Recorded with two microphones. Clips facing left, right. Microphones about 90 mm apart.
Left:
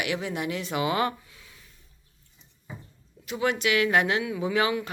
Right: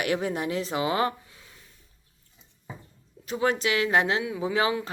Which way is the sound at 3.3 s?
35° right (ahead or behind).